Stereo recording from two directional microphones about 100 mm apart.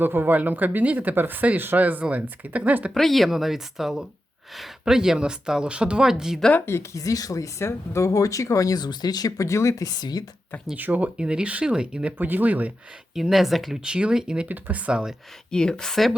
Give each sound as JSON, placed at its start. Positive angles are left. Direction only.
{"t": 0.0, "sound": "speech", "side_deg": -20}
{"t": 2.9, "sound": "speech", "side_deg": 0}
{"t": 6.7, "sound": "speech", "side_deg": 30}
{"t": 10.8, "sound": "speech", "side_deg": -15}
{"t": 13.1, "sound": "speech", "side_deg": -5}
{"t": 15.4, "sound": "speech", "side_deg": 5}